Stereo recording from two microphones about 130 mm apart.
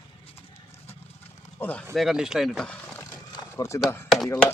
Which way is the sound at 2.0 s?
5° right (ahead or behind).